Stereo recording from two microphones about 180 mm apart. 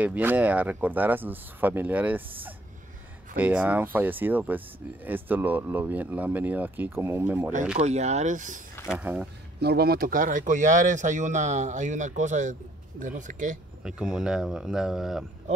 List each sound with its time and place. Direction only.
0.0 s speech: 10° right (ahead or behind)
3.3 s speech: 10° right (ahead or behind)
7.8 s speech: 40° right (ahead or behind)
8.9 s speech: 5° right (ahead or behind)
9.6 s speech: 60° right (ahead or behind); by 13.6 s 45° right (ahead or behind)
13.8 s speech: 5° right (ahead or behind)